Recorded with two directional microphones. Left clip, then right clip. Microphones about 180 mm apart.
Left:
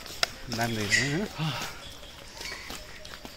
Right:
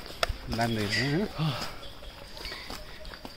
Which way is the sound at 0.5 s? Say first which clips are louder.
Left 3 dB; 10° right (ahead or behind).